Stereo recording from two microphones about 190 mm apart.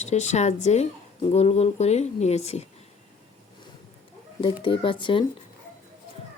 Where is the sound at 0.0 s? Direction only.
35° left (ahead or behind).